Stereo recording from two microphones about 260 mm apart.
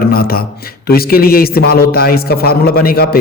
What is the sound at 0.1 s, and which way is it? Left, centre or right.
A man's voice, left.